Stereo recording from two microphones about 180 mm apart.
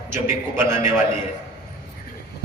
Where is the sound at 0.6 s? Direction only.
15° right (ahead or behind).